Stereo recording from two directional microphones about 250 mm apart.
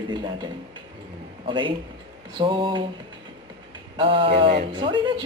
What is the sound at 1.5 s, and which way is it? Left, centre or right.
Speech, centre.